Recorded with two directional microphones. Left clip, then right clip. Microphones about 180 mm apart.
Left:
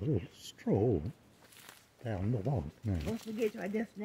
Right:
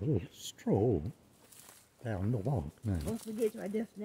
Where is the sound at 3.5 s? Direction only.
20° left (ahead or behind).